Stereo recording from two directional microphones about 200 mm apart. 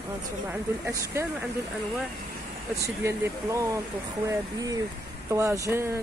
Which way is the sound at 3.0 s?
15° right (ahead or behind).